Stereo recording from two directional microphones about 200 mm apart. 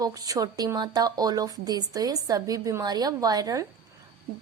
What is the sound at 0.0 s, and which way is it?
A woman's voice, 20° right (ahead or behind).